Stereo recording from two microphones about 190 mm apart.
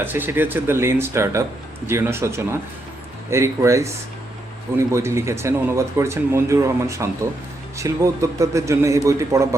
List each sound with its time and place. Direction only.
0.0 s speech: 10° right (ahead or behind)